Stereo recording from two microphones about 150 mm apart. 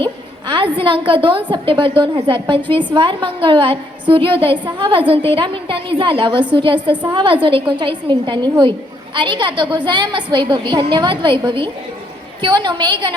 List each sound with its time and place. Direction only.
0.0 s a woman's voice: 35° right (ahead or behind)